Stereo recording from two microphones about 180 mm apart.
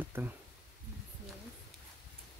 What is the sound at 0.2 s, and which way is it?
Speech, 15° right (ahead or behind).